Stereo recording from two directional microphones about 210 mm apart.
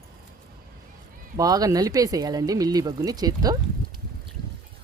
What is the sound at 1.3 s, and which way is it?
Speech, 15° right (ahead or behind).